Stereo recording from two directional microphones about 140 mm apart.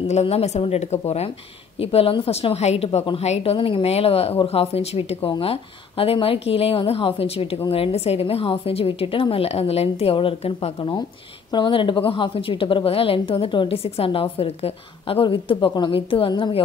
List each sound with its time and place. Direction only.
0.1 s a woman's voice: 50° left (ahead or behind)